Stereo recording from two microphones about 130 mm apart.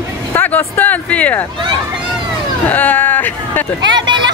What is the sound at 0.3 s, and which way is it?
Speech, 15° left (ahead or behind).